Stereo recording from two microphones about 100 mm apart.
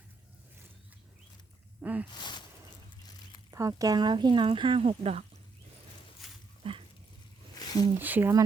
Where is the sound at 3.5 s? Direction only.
35° right (ahead or behind); by 5.2 s 85° right.